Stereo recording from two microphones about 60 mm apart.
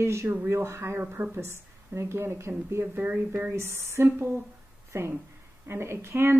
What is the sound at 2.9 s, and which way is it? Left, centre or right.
Speech, right.